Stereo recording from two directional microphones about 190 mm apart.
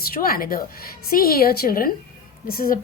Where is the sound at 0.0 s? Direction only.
50° left (ahead or behind).